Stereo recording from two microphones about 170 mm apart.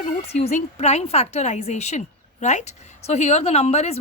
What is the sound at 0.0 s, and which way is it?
A woman's voice, 40° left (ahead or behind).